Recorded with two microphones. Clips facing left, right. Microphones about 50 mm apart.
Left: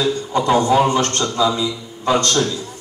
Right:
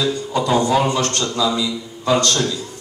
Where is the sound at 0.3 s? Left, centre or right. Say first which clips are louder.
Left 2 dB; left.